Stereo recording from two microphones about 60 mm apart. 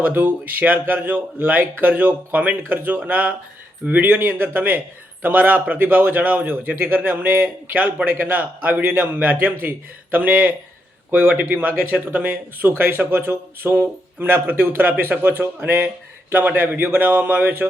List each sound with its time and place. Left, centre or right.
0.0 s speech: right